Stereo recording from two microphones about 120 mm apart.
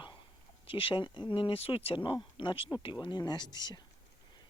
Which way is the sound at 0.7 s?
45° left (ahead or behind).